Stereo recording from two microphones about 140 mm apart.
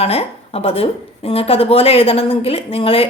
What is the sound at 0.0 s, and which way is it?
A woman's voice, 45° left (ahead or behind).